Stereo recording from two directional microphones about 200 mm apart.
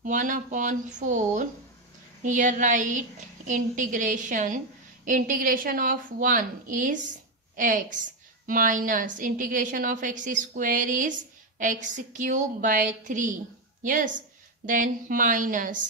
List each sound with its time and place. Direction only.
0.0 s a woman's voice: 40° right (ahead or behind)